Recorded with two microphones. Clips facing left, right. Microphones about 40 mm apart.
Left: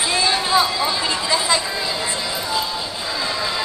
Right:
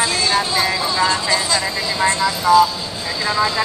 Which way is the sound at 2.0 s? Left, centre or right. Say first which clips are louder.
Right 7 dB; centre.